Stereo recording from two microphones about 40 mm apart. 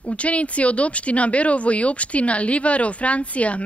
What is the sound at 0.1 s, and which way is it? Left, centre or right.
Speech, left.